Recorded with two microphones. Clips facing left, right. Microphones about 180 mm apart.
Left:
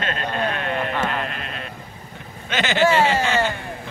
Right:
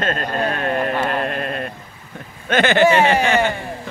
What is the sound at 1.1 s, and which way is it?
Sheep, 45° right (ahead or behind).